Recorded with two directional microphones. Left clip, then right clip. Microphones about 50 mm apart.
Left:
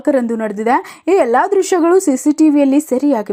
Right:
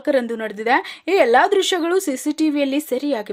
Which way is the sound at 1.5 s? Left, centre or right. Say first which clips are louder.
Left 4 dB; left.